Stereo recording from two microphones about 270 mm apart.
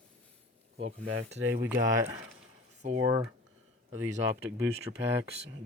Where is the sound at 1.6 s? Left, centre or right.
Centre.